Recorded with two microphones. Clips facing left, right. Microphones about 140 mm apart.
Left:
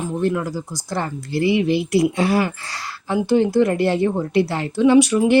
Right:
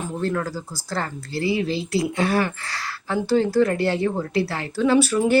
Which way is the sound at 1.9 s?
20° left (ahead or behind).